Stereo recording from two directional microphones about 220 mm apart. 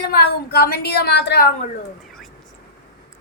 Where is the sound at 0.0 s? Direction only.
45° left (ahead or behind).